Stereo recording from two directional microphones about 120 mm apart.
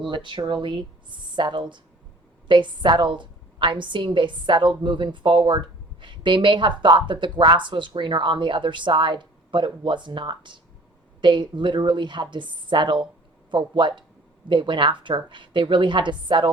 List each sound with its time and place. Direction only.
0.0 s a woman's voice: 40° right (ahead or behind)